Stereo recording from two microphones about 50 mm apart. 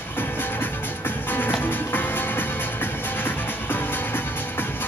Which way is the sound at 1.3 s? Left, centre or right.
Left.